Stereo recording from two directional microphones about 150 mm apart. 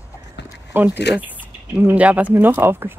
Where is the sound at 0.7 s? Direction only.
10° right (ahead or behind).